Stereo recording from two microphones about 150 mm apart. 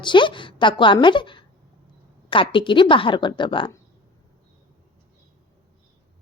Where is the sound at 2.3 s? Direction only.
35° left (ahead or behind).